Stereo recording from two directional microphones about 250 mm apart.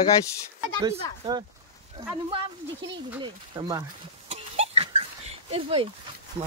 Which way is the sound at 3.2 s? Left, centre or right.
Centre.